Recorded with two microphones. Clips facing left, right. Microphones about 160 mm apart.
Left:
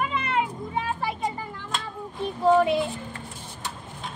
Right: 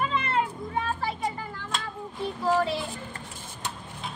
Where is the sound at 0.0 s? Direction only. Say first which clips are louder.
Left 1 dB; 15° left (ahead or behind).